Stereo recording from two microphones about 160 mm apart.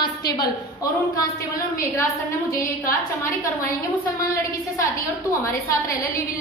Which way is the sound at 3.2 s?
20° left (ahead or behind).